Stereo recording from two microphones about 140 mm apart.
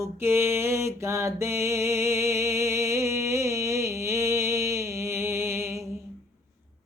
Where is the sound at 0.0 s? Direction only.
20° right (ahead or behind).